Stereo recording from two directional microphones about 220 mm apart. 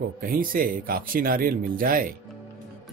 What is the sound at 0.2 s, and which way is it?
Speech, 40° right (ahead or behind).